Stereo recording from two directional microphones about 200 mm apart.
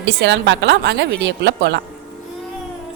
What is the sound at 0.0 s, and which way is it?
A woman's voice, 65° right (ahead or behind).